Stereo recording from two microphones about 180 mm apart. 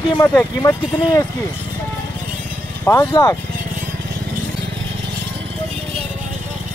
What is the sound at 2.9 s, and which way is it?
Speech, 20° left (ahead or behind).